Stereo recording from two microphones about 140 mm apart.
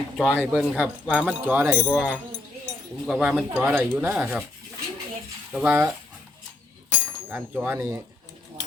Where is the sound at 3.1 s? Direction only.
5° right (ahead or behind).